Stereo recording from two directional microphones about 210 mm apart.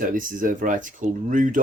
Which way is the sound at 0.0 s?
40° right (ahead or behind).